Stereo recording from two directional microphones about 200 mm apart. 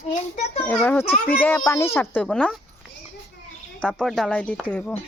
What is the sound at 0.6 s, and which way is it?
A child's voice, 10° left (ahead or behind).